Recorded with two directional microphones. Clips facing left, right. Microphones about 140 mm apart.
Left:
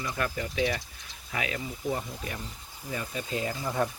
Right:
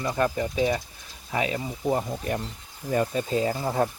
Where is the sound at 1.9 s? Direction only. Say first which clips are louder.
Right 8 dB; 45° right (ahead or behind).